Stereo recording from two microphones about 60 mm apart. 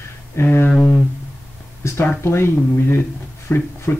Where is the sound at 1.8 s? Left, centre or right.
Left.